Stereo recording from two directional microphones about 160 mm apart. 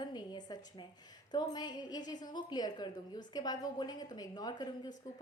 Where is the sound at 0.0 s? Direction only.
25° left (ahead or behind).